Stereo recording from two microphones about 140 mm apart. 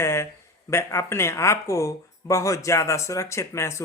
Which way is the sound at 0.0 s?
20° left (ahead or behind).